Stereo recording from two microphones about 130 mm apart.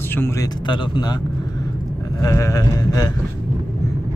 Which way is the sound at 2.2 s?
25° left (ahead or behind).